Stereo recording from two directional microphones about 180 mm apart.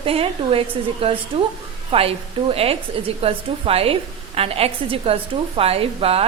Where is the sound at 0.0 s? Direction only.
30° right (ahead or behind).